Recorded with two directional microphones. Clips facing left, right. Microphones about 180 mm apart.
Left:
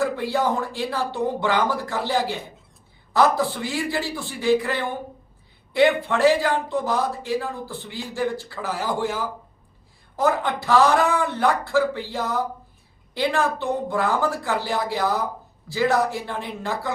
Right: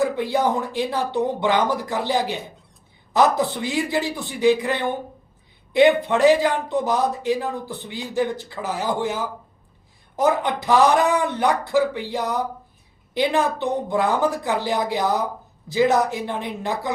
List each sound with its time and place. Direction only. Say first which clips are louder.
0.0 s speech: right 2 dB; 20° right (ahead or behind)